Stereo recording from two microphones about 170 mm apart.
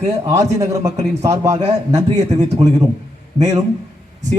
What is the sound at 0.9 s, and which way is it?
Speech, 40° right (ahead or behind).